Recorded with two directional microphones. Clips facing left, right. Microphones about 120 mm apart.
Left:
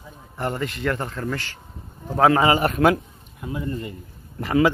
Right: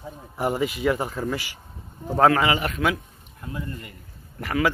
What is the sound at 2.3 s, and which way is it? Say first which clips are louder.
Speech: left 4 dB; 35° left (ahead or behind).